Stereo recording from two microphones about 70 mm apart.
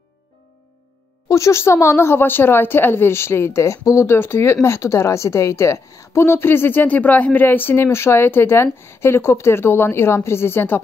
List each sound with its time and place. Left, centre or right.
1.3 s a woman's voice: left